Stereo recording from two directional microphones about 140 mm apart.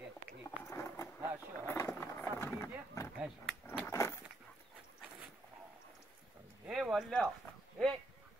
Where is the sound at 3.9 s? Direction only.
20° left (ahead or behind).